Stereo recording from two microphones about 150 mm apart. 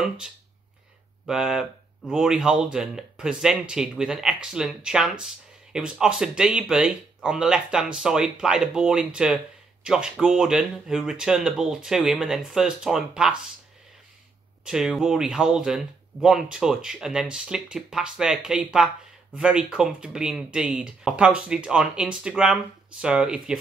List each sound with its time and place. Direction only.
1.2 s speech: 5° right (ahead or behind)
14.6 s speech: 5° right (ahead or behind)